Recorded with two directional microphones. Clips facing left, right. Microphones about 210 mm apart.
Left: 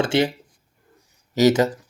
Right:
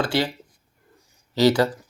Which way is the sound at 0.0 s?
25° left (ahead or behind).